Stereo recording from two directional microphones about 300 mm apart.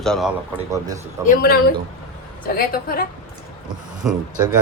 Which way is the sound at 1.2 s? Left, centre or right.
Left.